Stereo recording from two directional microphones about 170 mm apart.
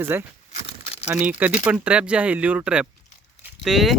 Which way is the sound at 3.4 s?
Centre (ahead or behind).